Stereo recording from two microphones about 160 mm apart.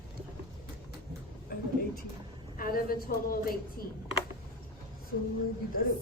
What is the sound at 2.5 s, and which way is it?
A woman's voice, 65° left (ahead or behind).